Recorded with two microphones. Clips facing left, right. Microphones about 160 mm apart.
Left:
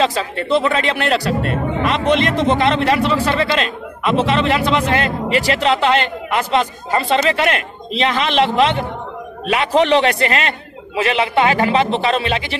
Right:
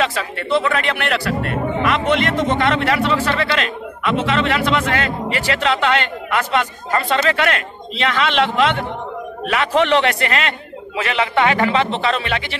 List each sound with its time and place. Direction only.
0.0 s a man's voice: 30° left (ahead or behind)
9.5 s speech: 20° left (ahead or behind)
9.8 s a man's voice: 35° left (ahead or behind)
11.9 s speech: 15° left (ahead or behind)